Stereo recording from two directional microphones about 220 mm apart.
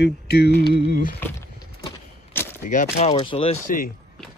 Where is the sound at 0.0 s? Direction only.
50° left (ahead or behind).